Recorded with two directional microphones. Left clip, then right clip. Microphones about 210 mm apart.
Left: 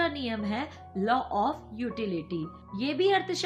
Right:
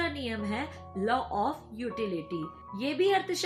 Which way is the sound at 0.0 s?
45° left (ahead or behind).